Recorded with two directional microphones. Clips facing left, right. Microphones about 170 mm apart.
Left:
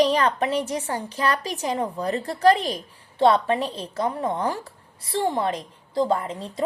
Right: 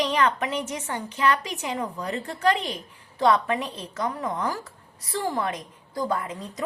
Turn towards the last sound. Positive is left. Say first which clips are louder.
# left 3 dB
turn(degrees=30)  # may be behind; listen again after turning